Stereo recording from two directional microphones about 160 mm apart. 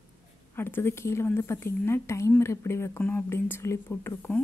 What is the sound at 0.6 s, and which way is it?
A woman's voice, 15° left (ahead or behind).